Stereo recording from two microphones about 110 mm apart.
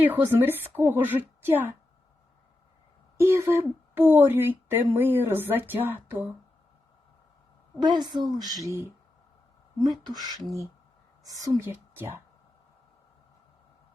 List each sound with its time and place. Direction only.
0.0 s a woman's voice: 15° right (ahead or behind)
3.2 s speech: 25° right (ahead or behind)
7.9 s a woman's voice: 40° right (ahead or behind)
10.1 s a woman's voice: 40° right (ahead or behind)
11.7 s speech: 20° right (ahead or behind)